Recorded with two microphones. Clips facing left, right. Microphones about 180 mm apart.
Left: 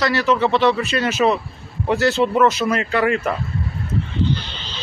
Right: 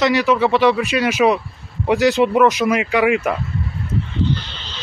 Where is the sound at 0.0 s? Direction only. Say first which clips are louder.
Right 2 dB; 15° right (ahead or behind).